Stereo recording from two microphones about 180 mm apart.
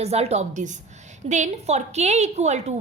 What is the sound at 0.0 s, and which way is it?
A woman's voice, 35° right (ahead or behind).